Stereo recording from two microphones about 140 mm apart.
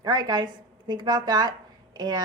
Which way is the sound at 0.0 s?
30° right (ahead or behind).